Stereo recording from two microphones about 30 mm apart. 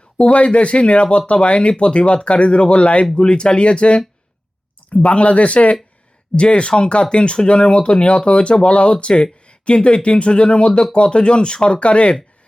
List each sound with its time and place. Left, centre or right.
0.2 s speech: left
3.2 s speech: left
5.0 s speech: left